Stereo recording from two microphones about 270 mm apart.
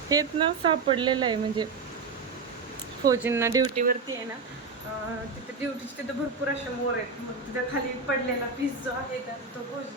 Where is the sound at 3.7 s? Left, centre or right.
Right.